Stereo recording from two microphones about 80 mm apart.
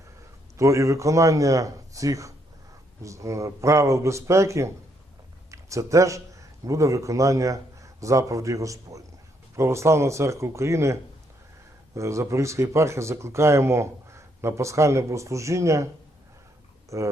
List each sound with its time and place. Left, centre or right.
0.5 s a man's voice: right
11.9 s speech: right
16.9 s speech: right